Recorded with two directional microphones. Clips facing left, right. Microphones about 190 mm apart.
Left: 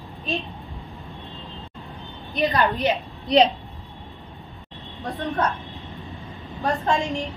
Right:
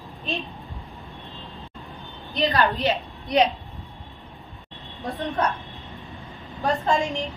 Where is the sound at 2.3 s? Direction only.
20° left (ahead or behind).